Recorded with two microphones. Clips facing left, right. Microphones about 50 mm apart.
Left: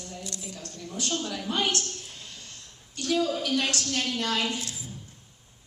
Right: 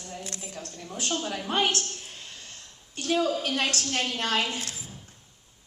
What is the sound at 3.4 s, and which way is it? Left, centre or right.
A woman's voice, right.